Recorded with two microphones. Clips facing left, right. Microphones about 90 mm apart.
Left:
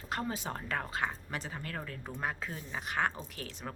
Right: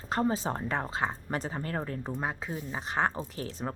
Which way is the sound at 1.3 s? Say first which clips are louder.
Right 7 dB; 35° right (ahead or behind).